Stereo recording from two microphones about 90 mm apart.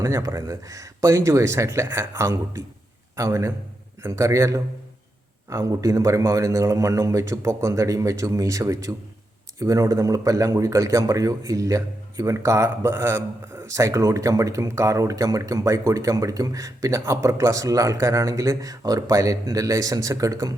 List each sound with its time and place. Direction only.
0.0 s speech: 35° right (ahead or behind)